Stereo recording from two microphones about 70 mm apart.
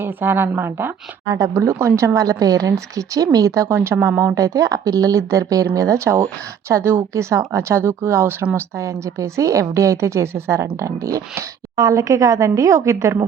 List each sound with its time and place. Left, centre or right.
0.0 s speech: right
1.3 s a woman's voice: right
4.4 s a woman's voice: right